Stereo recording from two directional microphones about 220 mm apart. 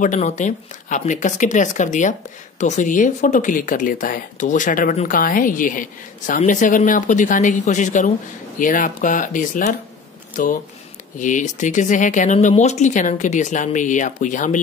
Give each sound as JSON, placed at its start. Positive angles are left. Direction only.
{"t": 0.0, "sound": "speech", "side_deg": 35}